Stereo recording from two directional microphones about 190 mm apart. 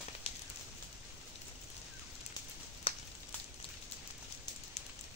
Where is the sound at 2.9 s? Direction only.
30° left (ahead or behind).